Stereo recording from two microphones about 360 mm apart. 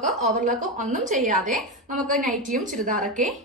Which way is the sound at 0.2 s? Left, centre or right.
Right.